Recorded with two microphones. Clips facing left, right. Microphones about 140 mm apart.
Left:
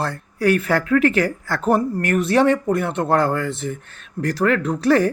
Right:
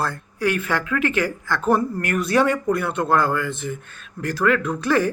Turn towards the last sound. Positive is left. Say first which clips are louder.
# left 4 dB
turn(degrees=35)  # may be behind; listen again after turning